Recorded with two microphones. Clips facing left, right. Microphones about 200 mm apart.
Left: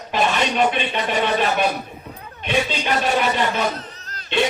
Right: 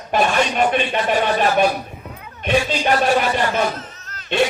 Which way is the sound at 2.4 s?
45° right (ahead or behind).